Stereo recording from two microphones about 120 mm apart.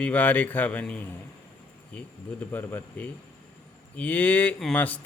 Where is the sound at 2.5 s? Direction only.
15° left (ahead or behind).